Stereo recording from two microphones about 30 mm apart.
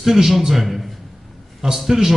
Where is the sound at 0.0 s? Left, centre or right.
Centre.